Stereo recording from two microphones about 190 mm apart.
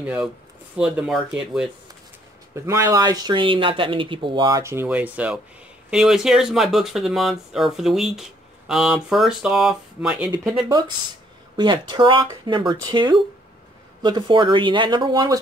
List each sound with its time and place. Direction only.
0.0 s speech: 5° right (ahead or behind)
2.5 s speech: 15° right (ahead or behind)
11.5 s speech: 25° right (ahead or behind)